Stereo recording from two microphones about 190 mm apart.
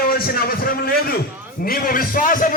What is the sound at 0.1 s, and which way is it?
A man's voice, 50° left (ahead or behind).